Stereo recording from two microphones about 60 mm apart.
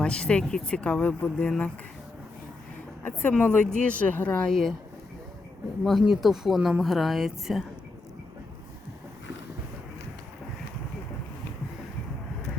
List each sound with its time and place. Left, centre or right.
0.0 s speech: centre
1.5 s speech: centre
3.0 s a woman's voice: left
3.4 s speech: left
4.4 s speech: centre
5.8 s speech: centre